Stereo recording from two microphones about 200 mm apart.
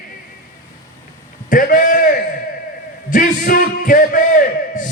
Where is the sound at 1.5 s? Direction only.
45° left (ahead or behind).